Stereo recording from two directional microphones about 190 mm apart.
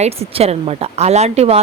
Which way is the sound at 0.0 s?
35° right (ahead or behind).